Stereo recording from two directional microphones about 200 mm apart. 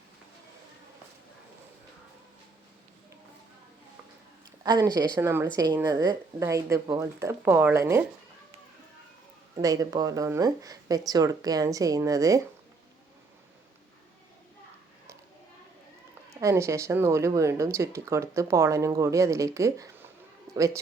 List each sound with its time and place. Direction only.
4.6 s a woman's voice: 20° right (ahead or behind)
9.6 s speech: 15° right (ahead or behind)
16.3 s speech: 15° right (ahead or behind)